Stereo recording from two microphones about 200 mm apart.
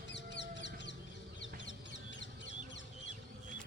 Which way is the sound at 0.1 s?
60° left (ahead or behind).